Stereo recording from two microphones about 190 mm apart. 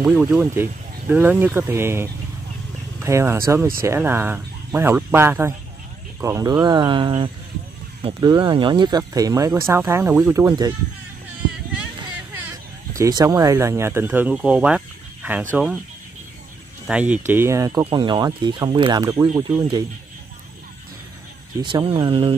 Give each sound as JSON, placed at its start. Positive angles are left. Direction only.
{"t": 0.0, "sound": "speech", "side_deg": -5}
{"t": 12.9, "sound": "speech", "side_deg": -15}
{"t": 16.8, "sound": "speech", "side_deg": -5}
{"t": 21.5, "sound": "speech", "side_deg": -25}